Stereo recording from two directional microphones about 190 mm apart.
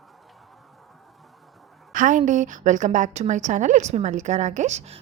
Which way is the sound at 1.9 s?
45° right (ahead or behind).